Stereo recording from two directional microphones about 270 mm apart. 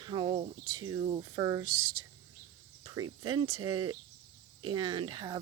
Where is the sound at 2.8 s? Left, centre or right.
Centre.